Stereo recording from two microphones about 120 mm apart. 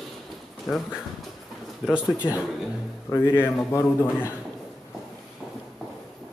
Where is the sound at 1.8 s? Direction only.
Centre (ahead or behind).